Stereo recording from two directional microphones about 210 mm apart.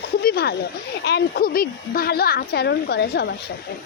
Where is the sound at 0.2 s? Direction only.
50° left (ahead or behind).